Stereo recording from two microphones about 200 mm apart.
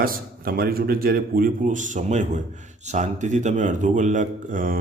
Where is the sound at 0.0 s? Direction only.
45° right (ahead or behind).